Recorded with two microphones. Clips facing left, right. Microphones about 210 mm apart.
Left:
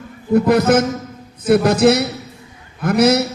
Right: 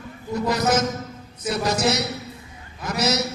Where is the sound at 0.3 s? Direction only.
55° left (ahead or behind).